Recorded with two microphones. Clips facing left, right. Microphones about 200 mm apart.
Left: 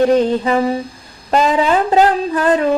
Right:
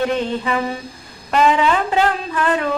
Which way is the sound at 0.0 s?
40° left (ahead or behind).